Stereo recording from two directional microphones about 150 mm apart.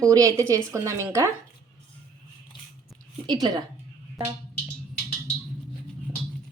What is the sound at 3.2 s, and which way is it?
Speech, 30° right (ahead or behind).